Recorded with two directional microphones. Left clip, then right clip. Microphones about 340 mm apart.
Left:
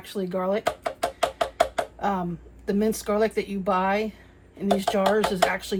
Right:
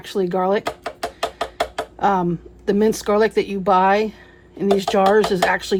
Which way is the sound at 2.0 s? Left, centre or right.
Right.